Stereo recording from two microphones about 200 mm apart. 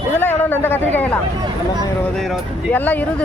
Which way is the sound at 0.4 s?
10° left (ahead or behind).